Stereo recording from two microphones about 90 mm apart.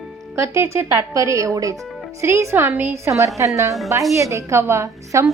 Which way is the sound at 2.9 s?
35° right (ahead or behind).